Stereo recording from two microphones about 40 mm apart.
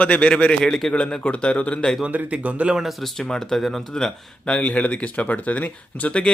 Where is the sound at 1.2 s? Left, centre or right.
Left.